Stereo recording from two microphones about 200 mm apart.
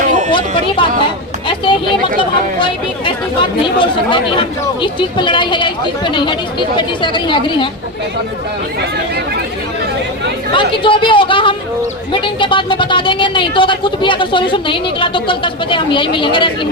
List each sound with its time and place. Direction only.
0.3 s a woman's voice: 25° left (ahead or behind)
10.5 s a woman's voice: 25° left (ahead or behind)